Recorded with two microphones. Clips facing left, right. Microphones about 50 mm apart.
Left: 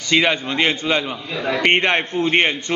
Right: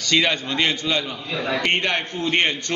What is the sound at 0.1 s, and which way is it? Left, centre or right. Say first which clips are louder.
A man's voice: left 3 dB; left.